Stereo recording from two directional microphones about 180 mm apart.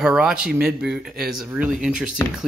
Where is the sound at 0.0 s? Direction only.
5° right (ahead or behind).